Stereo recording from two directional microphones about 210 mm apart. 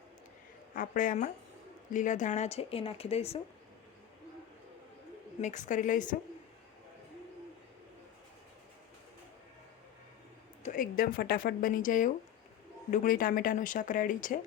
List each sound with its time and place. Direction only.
0.8 s speech: 40° left (ahead or behind)
5.4 s speech: 35° left (ahead or behind)
10.6 s speech: 40° left (ahead or behind)